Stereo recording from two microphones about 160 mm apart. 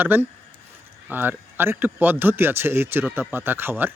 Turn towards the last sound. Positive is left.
turn(degrees=-15)  # may be behind; listen again after turning